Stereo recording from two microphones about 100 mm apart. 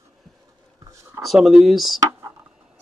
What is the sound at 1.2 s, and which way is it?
Speech, centre (ahead or behind).